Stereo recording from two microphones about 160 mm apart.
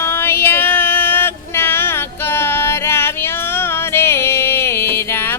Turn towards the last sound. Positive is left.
turn(degrees=15)  # may be behind; listen again after turning